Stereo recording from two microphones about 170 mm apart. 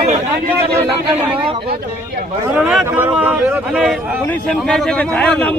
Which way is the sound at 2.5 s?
5° right (ahead or behind).